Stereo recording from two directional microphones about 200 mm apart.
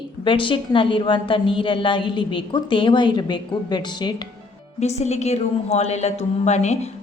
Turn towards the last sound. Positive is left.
turn(degrees=35)  # may be behind; listen again after turning